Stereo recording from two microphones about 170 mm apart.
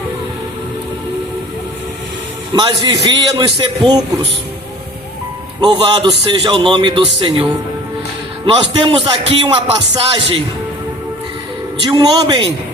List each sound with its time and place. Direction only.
2.5 s a man's voice: 25° right (ahead or behind)
5.5 s a man's voice: 25° right (ahead or behind)
8.8 s a man's voice: 30° right (ahead or behind)
11.8 s a man's voice: 25° right (ahead or behind)